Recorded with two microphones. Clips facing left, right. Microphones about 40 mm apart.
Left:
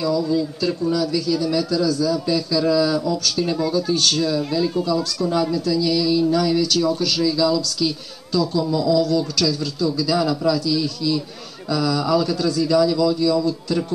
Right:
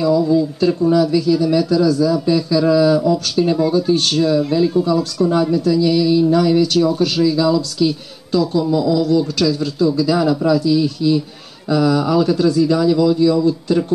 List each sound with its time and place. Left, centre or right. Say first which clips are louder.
0.0 s speech: right 6 dB; right